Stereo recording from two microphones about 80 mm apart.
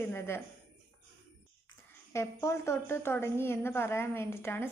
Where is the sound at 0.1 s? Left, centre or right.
Left.